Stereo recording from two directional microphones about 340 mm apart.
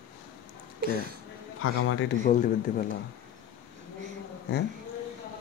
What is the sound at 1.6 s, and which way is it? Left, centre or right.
Speech, left.